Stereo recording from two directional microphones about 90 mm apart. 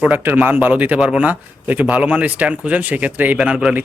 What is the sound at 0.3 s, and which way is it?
Speech, 20° right (ahead or behind).